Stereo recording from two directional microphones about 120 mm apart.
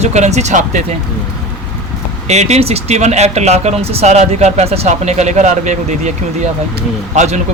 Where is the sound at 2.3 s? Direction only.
70° right (ahead or behind).